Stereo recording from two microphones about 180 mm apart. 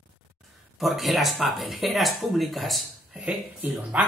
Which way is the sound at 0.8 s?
Centre (ahead or behind).